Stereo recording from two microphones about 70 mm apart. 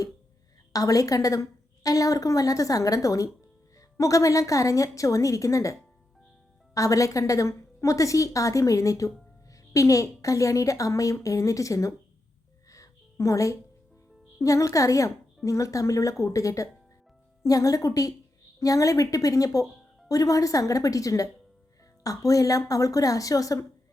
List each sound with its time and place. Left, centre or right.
0.7 s a woman's voice: left
6.7 s a woman's voice: left
12.7 s music: left
14.3 s a woman's voice: left